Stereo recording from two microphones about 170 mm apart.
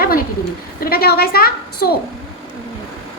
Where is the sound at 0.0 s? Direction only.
60° left (ahead or behind).